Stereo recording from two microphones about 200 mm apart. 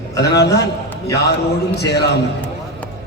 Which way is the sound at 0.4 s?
55° left (ahead or behind).